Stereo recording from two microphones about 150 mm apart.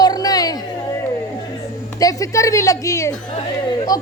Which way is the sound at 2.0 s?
20° left (ahead or behind).